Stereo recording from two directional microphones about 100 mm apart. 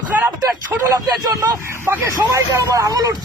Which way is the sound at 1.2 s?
40° right (ahead or behind).